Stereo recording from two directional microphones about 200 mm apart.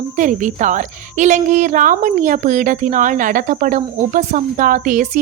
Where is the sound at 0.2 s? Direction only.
40° right (ahead or behind).